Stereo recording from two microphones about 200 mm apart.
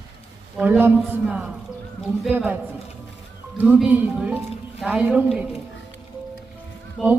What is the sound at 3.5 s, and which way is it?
A man's voice, 5° right (ahead or behind).